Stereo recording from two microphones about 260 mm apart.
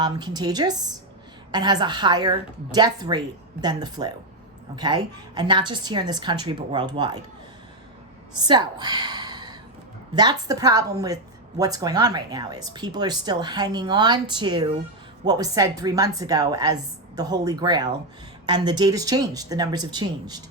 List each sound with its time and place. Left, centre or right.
0.0 s a woman's voice: centre
8.4 s a woman's voice: centre